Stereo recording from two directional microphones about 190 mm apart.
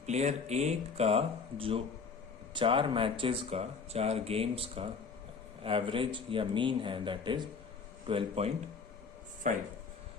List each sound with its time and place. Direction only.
0.0 s speech: 35° right (ahead or behind)
9.5 s speech: 40° right (ahead or behind)